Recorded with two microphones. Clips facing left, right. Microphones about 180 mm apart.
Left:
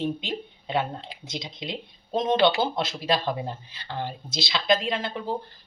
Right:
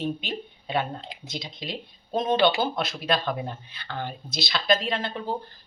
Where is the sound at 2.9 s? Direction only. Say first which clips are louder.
Left 1 dB; centre (ahead or behind).